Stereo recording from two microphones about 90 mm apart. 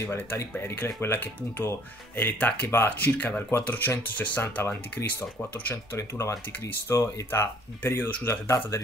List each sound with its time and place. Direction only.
0.0 s speech: 25° left (ahead or behind)
5.9 s speech: 35° left (ahead or behind)